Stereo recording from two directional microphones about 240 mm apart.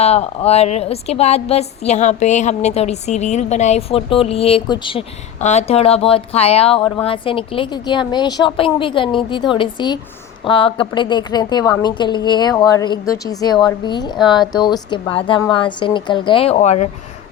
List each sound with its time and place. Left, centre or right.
0.0 s speech: left